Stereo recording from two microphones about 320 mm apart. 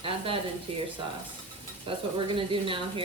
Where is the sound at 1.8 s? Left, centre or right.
Centre.